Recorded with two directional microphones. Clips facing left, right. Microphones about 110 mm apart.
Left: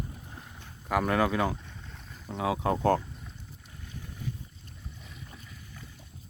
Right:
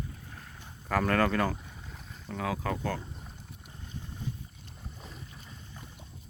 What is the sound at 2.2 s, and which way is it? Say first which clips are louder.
Speech: left 4 dB; 20° left (ahead or behind).